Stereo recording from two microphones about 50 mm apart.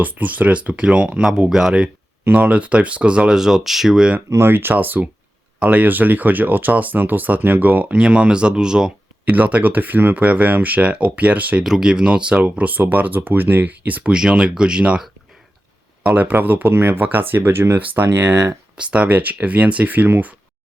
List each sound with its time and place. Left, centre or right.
0.0 s speech: right
1.5 s speech: centre
2.3 s speech: right
3.3 s speech: centre
4.4 s speech: right
7.9 s speech: right
9.3 s speech: right
11.6 s speech: centre; by 14.1 s right
14.1 s speech: centre
16.1 s speech: right
18.8 s speech: right